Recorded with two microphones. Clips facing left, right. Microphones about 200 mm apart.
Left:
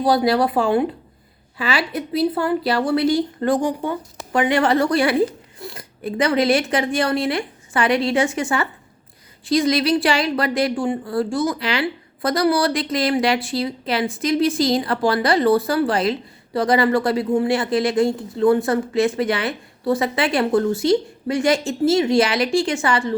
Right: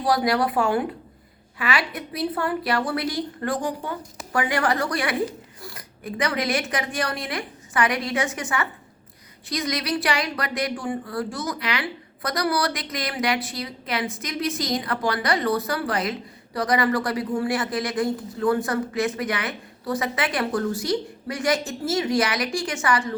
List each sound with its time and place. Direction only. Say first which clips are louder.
0.0 s speech: left 5 dB; 25° left (ahead or behind)